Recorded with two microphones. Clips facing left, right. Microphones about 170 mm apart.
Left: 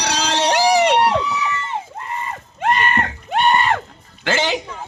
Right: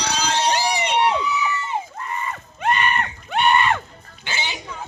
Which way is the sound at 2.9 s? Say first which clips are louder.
Left 3 dB; 90° left.